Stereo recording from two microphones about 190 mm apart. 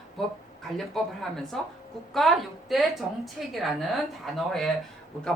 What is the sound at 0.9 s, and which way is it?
A woman's voice, centre (ahead or behind).